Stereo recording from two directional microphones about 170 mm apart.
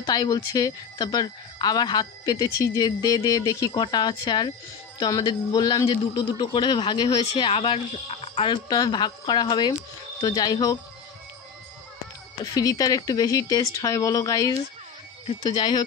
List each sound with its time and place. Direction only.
0.0 s speech: 20° left (ahead or behind)
12.5 s speech: 20° left (ahead or behind)